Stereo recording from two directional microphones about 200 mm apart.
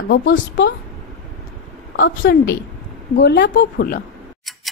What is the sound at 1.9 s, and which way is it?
A woman's voice, 65° left (ahead or behind).